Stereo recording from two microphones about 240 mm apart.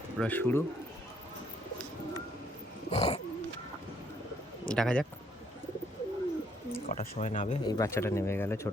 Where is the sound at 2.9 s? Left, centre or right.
Left.